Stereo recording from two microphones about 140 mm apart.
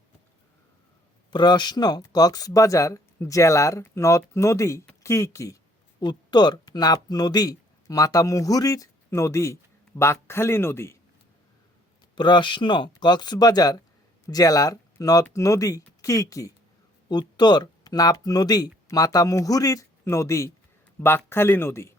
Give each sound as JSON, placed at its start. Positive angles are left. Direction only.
{"t": 1.3, "sound": "speech", "side_deg": 30}
{"t": 6.0, "sound": "speech", "side_deg": 30}
{"t": 12.1, "sound": "speech", "side_deg": 35}